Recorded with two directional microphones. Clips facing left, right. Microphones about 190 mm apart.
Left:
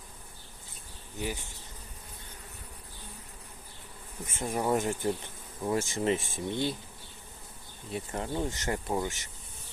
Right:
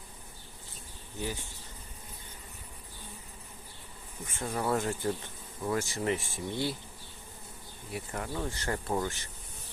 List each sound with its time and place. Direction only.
1.2 s speech: 15° left (ahead or behind)
4.3 s speech: 20° left (ahead or behind)
7.9 s speech: 25° left (ahead or behind)